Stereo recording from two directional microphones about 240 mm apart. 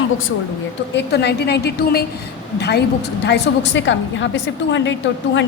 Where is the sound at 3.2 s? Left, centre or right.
Left.